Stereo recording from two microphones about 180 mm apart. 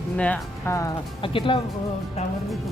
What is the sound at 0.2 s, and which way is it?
Speech, 5° left (ahead or behind).